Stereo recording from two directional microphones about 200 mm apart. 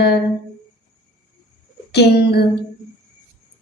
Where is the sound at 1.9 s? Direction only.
55° left (ahead or behind).